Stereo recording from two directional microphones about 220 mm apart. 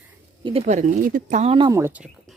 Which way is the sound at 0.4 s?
30° right (ahead or behind).